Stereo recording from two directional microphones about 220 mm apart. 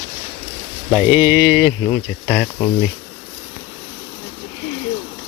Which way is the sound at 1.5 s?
5° right (ahead or behind).